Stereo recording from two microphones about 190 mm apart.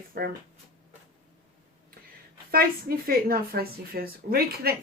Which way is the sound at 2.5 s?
50° right (ahead or behind).